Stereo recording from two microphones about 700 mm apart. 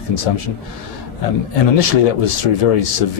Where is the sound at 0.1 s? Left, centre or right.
Left.